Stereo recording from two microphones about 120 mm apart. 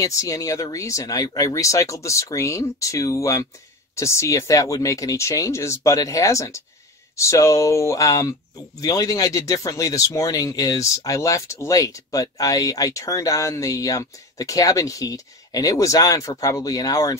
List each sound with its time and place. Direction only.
0.0 s speech: 30° left (ahead or behind)